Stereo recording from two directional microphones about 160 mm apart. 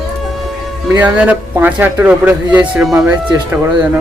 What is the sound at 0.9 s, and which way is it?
Speech, 10° right (ahead or behind).